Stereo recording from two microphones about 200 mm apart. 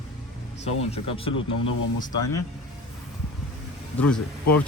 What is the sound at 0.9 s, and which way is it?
Speech, 30° left (ahead or behind).